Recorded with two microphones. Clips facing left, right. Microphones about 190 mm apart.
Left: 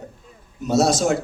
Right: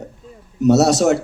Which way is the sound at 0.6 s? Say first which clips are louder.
Right 5 dB; 70° right (ahead or behind).